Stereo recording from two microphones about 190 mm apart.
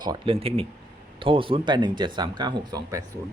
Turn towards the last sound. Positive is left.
turn(degrees=-20)  # may be behind; listen again after turning